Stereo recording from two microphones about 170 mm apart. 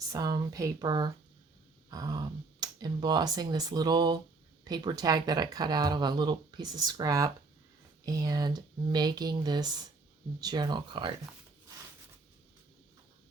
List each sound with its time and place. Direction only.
0.1 s speech: 20° right (ahead or behind)